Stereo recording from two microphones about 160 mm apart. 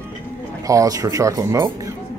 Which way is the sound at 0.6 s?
20° right (ahead or behind).